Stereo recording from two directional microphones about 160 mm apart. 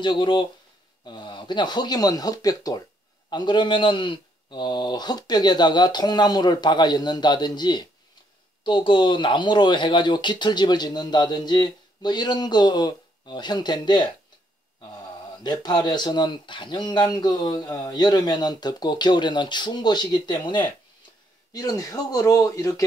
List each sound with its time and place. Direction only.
0.0 s speech: 30° left (ahead or behind)
15.4 s speech: 25° left (ahead or behind)